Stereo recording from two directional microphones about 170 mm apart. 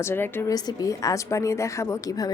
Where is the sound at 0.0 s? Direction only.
15° left (ahead or behind).